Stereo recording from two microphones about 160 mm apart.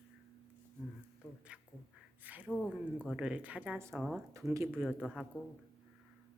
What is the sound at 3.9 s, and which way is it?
A woman's voice, centre (ahead or behind).